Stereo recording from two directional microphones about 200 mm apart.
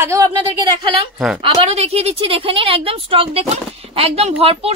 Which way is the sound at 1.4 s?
30° right (ahead or behind).